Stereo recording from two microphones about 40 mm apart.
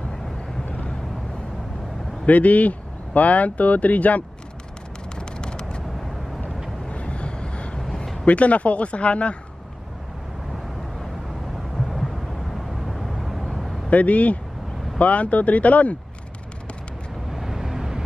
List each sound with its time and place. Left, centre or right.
2.2 s speech: left
5.2 s clip-clop: left
6.9 s vehicle: left
7.8 s a sound: centre
8.3 s speech: left
12.5 s vehicle: centre
13.8 s speech: left
17.3 s vehicle: centre